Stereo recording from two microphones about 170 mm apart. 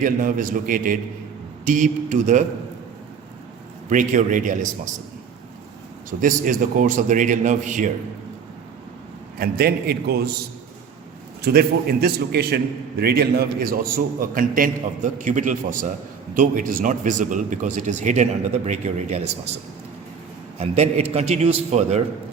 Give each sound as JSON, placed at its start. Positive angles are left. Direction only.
{"t": 0.0, "sound": "a man's voice", "side_deg": -50}
{"t": 3.8, "sound": "a man's voice", "side_deg": -50}
{"t": 6.1, "sound": "a man's voice", "side_deg": -50}
{"t": 9.4, "sound": "a man's voice", "side_deg": -65}
{"t": 11.4, "sound": "a man's voice", "side_deg": -65}
{"t": 20.6, "sound": "a man's voice", "side_deg": -40}